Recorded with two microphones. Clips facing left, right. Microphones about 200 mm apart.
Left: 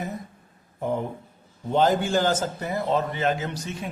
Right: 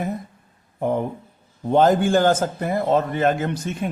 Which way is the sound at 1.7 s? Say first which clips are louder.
Right 5 dB; 50° right (ahead or behind).